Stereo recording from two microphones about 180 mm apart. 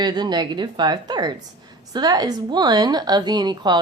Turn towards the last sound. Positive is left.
turn(degrees=-25)  # may be behind; listen again after turning